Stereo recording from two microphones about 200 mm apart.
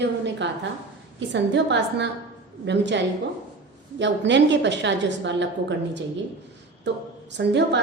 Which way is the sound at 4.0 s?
65° right (ahead or behind).